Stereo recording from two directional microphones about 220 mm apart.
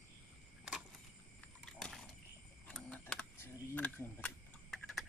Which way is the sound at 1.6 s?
5° left (ahead or behind).